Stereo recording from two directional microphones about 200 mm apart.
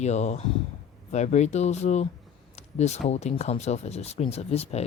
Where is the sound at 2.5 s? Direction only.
35° left (ahead or behind).